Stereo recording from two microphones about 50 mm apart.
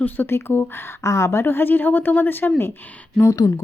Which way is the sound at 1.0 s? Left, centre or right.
Left.